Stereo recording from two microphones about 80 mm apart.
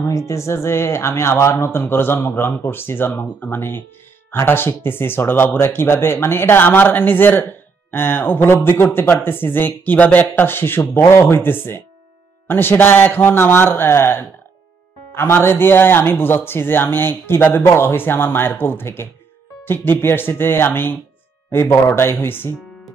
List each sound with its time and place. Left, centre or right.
0.0 s speech: left